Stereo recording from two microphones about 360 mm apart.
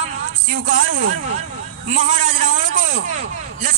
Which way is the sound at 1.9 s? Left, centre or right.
Right.